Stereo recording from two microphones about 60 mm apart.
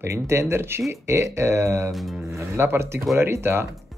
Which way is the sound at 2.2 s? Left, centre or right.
Right.